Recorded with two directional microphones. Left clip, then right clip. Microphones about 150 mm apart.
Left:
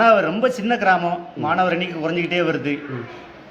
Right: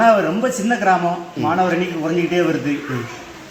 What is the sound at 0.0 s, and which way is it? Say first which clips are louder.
A man's voice: right 1 dB; 15° left (ahead or behind).